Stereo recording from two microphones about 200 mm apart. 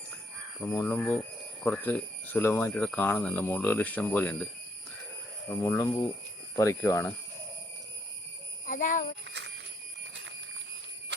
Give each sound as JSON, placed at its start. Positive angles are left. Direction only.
{"t": 0.6, "sound": "speech", "side_deg": 10}
{"t": 5.5, "sound": "speech", "side_deg": 10}
{"t": 8.6, "sound": "a child's voice", "side_deg": 40}
{"t": 9.2, "sound": "a sound", "side_deg": -60}